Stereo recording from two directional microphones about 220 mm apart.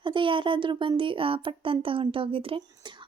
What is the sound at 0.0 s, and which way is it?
Speech, 20° right (ahead or behind).